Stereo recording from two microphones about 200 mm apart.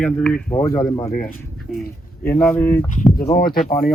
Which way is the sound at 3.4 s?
50° left (ahead or behind).